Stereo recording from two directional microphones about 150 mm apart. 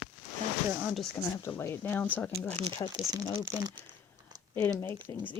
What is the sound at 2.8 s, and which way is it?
Speech, 25° left (ahead or behind).